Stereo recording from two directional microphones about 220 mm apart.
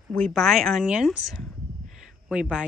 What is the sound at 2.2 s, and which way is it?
Speech, 5° right (ahead or behind).